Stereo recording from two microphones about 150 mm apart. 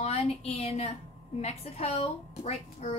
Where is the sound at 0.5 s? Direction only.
40° left (ahead or behind).